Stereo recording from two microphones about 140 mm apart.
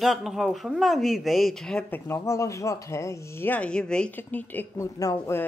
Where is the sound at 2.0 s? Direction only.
20° left (ahead or behind).